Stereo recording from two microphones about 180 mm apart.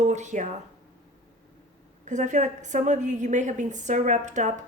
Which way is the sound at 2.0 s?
45° right (ahead or behind).